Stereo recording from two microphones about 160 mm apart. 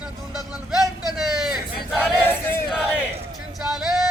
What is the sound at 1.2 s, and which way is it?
Battle cry, 5° right (ahead or behind).